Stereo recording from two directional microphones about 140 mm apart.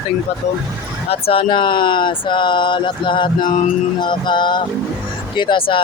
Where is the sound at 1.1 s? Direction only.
40° left (ahead or behind).